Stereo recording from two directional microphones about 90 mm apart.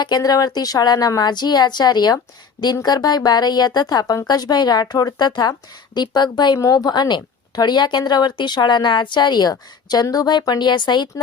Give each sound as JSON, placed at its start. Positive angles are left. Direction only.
{"t": 0.0, "sound": "speech", "side_deg": 50}
{"t": 6.6, "sound": "speech", "side_deg": 40}